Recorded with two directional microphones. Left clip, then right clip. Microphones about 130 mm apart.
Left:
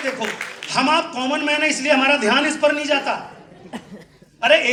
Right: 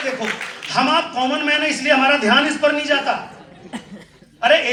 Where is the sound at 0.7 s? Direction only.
30° left (ahead or behind).